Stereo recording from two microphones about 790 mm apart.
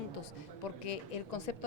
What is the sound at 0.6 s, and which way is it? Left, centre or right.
A woman's voice, left.